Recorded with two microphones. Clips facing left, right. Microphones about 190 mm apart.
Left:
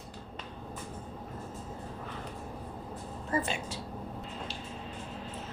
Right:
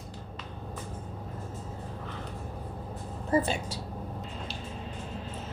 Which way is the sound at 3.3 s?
35° right (ahead or behind).